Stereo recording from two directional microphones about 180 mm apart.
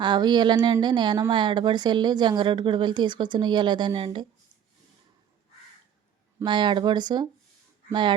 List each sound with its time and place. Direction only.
0.0 s a woman's voice: 25° right (ahead or behind)
6.4 s a woman's voice: 25° right (ahead or behind)